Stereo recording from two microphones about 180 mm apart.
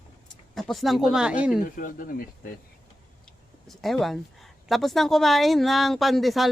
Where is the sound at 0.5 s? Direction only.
Centre (ahead or behind).